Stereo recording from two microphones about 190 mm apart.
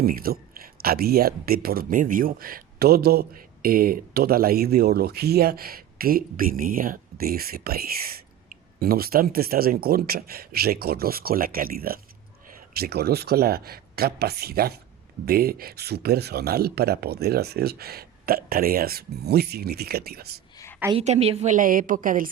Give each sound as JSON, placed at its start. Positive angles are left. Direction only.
{"t": 0.0, "sound": "speech", "side_deg": -50}
{"t": 20.9, "sound": "speech", "side_deg": -35}